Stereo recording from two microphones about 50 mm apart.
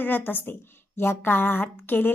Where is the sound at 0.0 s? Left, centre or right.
Left.